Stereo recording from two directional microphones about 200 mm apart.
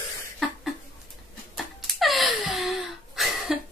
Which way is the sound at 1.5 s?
Centre (ahead or behind).